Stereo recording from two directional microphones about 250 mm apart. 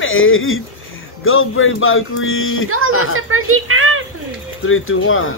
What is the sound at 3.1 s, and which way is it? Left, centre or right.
Speech, right.